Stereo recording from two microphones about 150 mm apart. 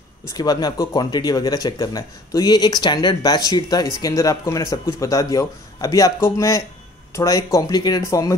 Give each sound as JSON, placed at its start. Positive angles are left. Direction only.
{"t": 0.4, "sound": "speech", "side_deg": 25}